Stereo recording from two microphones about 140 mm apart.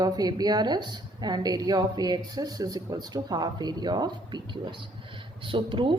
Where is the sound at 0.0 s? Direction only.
30° right (ahead or behind).